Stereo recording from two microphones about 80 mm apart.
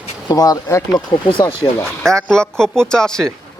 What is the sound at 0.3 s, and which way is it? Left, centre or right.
Speech, left.